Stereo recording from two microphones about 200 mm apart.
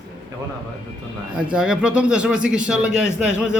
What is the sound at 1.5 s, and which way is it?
A man's voice, 5° right (ahead or behind).